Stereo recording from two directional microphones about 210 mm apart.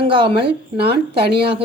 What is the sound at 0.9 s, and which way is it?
Speech, 50° right (ahead or behind).